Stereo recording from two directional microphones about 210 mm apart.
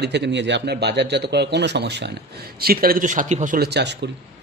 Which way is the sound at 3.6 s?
50° right (ahead or behind).